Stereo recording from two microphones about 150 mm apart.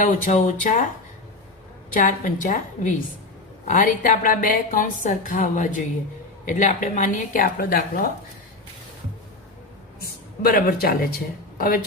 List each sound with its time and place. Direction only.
0.0 s a woman's voice: 55° left (ahead or behind)
1.9 s a woman's voice: 60° left (ahead or behind); by 8.0 s 80° left
10.0 s speech: 80° left